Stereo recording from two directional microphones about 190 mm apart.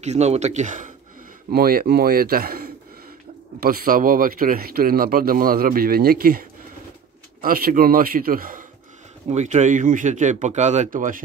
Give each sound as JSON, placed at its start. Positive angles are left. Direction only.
{"t": 0.0, "sound": "speech", "side_deg": -35}
{"t": 7.4, "sound": "speech", "side_deg": -50}
{"t": 9.3, "sound": "speech", "side_deg": -35}